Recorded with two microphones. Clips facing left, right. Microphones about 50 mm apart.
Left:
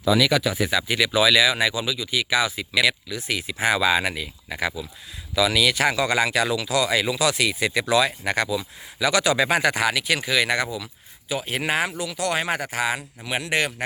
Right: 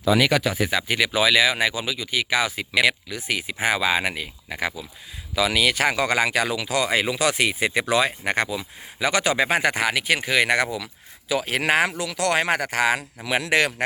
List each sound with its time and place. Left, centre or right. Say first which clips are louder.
0.2 s speech: even; right
0.5 s speech: even; right
5.3 s speech: left 1 dB; right
11.3 s speech: right 3 dB; right